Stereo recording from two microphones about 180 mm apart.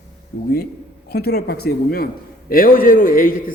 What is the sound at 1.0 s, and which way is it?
A woman's voice, 60° left (ahead or behind).